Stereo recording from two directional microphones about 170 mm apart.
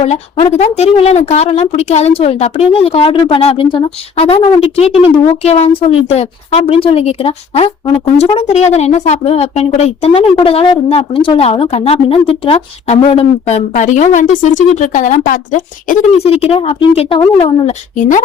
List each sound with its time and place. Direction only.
0.0 s speech: 35° left (ahead or behind)